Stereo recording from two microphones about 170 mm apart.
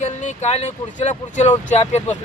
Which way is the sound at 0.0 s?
45° left (ahead or behind).